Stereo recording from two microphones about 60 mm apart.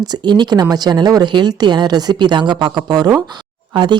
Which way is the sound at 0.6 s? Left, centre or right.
Right.